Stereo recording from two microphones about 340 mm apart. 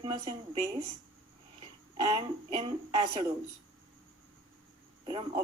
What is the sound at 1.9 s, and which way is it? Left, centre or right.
Speech, centre.